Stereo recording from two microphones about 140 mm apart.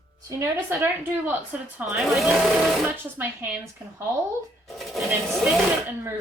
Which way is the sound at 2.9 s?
15° right (ahead or behind).